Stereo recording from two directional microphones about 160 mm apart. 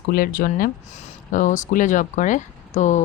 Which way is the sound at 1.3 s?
50° left (ahead or behind).